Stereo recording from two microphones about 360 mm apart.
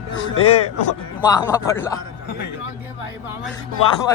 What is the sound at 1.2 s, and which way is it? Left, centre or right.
Speech, centre.